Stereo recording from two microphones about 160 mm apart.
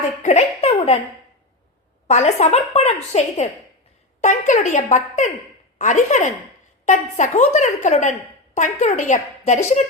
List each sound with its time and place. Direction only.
0.2 s a woman's voice: 45° left (ahead or behind)
2.0 s a woman's voice: 45° left (ahead or behind)